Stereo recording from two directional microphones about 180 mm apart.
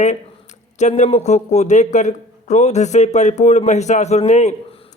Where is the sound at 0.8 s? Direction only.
40° left (ahead or behind).